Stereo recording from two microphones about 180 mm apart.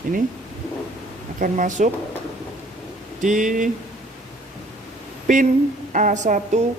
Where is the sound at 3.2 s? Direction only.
45° right (ahead or behind).